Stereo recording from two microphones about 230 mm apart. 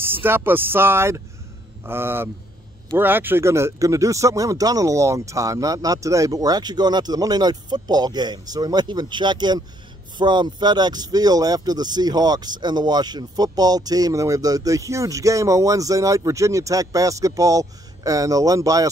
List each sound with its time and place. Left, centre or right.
0.0 s speech: centre